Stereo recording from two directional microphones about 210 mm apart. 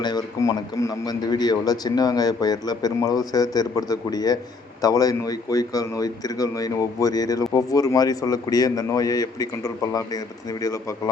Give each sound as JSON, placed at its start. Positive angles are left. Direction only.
{"t": 0.0, "sound": "a man's voice", "side_deg": 20}